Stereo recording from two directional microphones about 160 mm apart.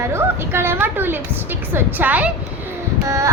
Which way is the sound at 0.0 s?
15° right (ahead or behind).